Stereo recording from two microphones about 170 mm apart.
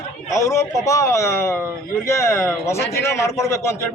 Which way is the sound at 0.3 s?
20° left (ahead or behind).